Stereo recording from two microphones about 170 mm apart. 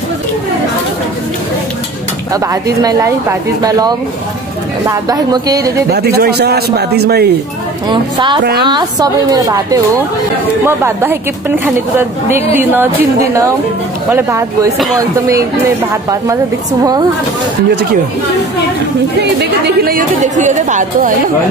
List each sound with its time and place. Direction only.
2.4 s a woman's voice: 20° right (ahead or behind)
4.8 s a woman's voice: 20° right (ahead or behind)
5.9 s a man's voice: 70° right (ahead or behind)
7.9 s a woman's voice: 25° right (ahead or behind)
19.6 s a woman's voice: 60° right (ahead or behind); by 21.1 s 45° right (ahead or behind)